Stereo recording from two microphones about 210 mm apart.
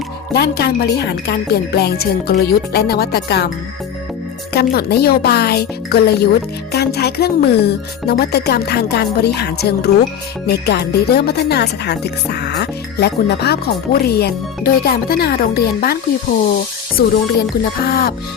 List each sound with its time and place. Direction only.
0.3 s speech: 50° left (ahead or behind)
4.5 s speech: 50° left (ahead or behind)
17.0 s speech: 45° left (ahead or behind)